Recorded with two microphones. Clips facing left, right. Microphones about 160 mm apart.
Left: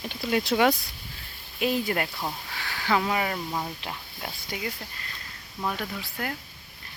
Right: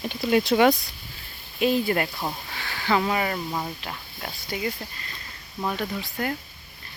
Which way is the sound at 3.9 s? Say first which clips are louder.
Right 1 dB; 15° left (ahead or behind).